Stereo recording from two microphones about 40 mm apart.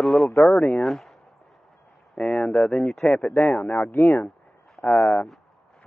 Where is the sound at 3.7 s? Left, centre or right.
Left.